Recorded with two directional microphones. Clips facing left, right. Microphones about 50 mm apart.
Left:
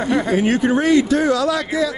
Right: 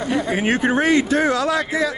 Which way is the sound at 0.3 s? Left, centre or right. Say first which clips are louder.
Left 2 dB; right.